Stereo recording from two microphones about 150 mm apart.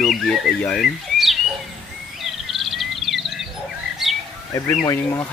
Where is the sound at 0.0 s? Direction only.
Centre (ahead or behind).